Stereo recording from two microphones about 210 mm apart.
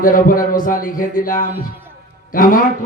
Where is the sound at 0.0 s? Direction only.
40° left (ahead or behind).